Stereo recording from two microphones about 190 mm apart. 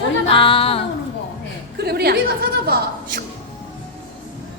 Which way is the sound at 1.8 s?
55° right (ahead or behind).